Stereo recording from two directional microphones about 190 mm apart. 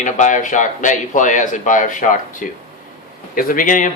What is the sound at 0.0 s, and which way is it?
Speech, 40° left (ahead or behind).